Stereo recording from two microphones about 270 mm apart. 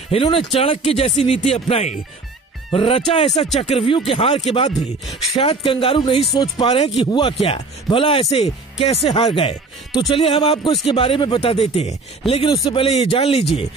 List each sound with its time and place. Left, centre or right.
0.1 s speech: left